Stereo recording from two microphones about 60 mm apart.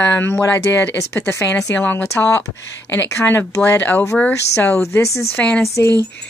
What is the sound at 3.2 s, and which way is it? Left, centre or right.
Speech, left.